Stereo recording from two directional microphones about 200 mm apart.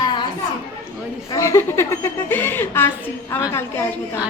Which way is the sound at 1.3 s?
15° left (ahead or behind).